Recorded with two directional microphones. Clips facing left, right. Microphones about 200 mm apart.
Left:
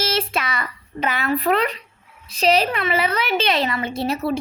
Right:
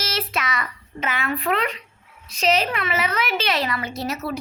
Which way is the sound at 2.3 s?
35° left (ahead or behind).